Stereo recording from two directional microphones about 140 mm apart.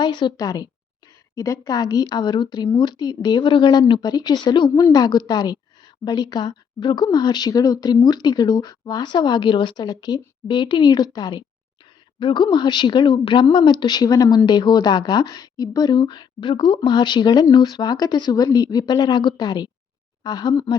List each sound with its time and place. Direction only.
0.0 s speech: 35° left (ahead or behind)